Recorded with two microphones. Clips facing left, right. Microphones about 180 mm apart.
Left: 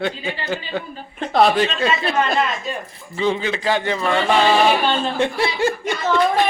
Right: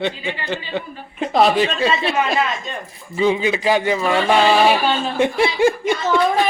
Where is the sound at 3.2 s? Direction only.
10° right (ahead or behind).